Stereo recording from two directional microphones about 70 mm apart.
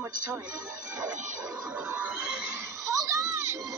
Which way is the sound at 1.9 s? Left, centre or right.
Right.